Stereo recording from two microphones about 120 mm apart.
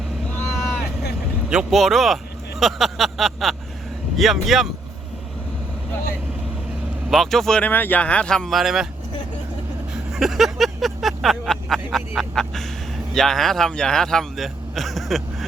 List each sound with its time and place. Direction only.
1.5 s a man's voice: 5° right (ahead or behind)
7.1 s a man's voice: centre (ahead or behind)
10.1 s vehicle: centre (ahead or behind)
13.1 s a man's voice: 5° left (ahead or behind)